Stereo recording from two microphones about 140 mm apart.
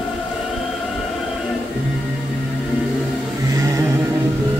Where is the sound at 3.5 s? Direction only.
20° right (ahead or behind).